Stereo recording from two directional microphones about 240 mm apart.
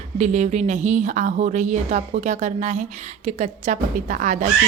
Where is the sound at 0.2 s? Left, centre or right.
Right.